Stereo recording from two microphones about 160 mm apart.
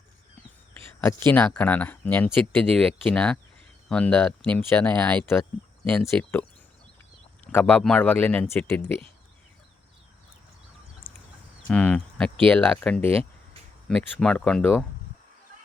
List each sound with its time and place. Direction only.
1.3 s speech: 10° left (ahead or behind)
7.5 s speech: 10° left (ahead or behind)
11.1 s a sound: 15° left (ahead or behind)
11.7 s speech: 5° left (ahead or behind)
13.1 s a sound: 35° right (ahead or behind)
13.8 s speech: 5° left (ahead or behind)